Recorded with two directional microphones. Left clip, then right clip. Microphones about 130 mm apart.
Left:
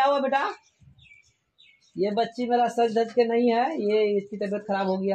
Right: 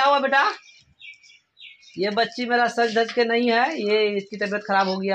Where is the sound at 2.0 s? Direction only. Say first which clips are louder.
Right 3 dB; centre (ahead or behind).